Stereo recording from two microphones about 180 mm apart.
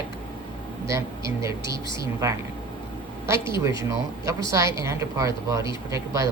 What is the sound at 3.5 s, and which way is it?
Speech, 15° right (ahead or behind).